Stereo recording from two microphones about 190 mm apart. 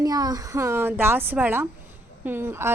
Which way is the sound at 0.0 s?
20° right (ahead or behind).